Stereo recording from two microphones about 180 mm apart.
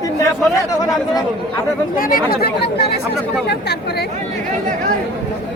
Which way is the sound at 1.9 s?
50° left (ahead or behind).